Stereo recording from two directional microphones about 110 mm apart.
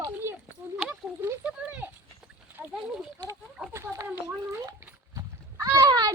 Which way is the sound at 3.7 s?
30° right (ahead or behind).